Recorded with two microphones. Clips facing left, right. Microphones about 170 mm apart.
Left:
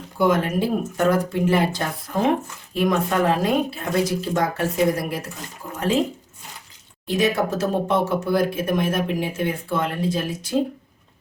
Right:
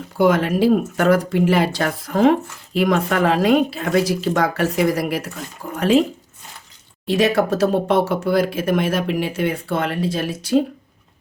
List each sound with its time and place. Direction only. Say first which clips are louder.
0.2 s speech: right 4 dB; 85° right
7.1 s speech: right 4 dB; 75° right (ahead or behind)